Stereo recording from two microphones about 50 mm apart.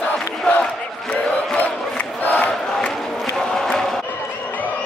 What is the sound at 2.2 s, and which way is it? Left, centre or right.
Crowd, left.